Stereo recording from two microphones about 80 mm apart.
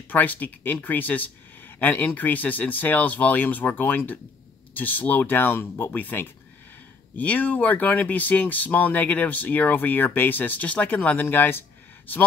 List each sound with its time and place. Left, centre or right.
0.1 s speech: left